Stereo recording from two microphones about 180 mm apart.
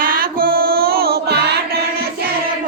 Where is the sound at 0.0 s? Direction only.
50° right (ahead or behind).